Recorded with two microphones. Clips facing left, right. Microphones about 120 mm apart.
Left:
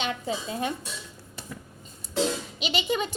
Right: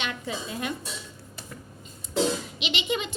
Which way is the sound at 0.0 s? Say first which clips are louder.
Left 3 dB; 30° left (ahead or behind).